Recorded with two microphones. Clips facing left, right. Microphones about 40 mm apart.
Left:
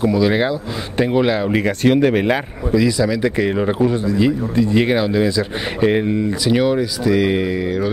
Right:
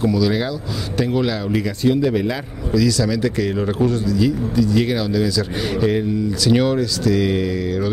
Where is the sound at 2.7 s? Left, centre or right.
Left.